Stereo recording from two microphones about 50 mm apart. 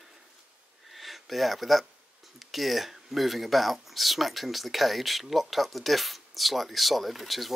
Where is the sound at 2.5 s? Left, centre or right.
Centre.